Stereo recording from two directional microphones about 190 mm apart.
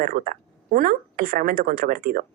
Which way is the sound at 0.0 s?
50° right (ahead or behind).